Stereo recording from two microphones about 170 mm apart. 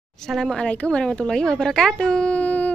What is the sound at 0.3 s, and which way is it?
A woman's voice, centre (ahead or behind).